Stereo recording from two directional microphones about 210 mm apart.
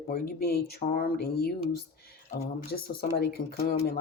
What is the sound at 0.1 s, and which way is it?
Speech, 50° left (ahead or behind).